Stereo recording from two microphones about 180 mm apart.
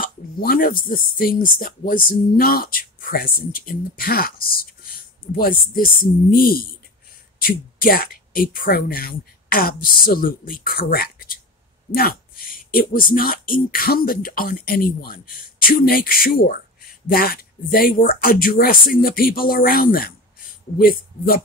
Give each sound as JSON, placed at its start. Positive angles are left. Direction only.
{"t": 0.0, "sound": "speech", "side_deg": 55}